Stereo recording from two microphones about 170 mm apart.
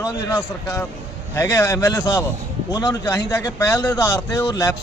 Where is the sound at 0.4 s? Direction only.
15° left (ahead or behind).